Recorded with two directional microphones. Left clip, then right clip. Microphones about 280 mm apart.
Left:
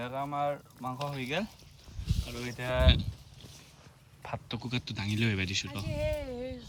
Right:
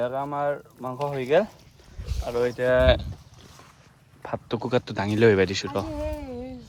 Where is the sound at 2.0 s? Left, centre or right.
Centre.